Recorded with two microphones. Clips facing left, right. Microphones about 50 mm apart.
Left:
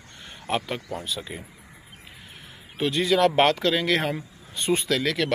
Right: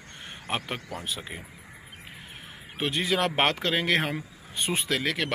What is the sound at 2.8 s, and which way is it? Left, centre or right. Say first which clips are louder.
Speech: left 5 dB; right.